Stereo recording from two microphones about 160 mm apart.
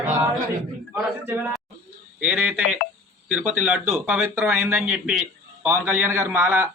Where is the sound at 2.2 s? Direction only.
10° right (ahead or behind).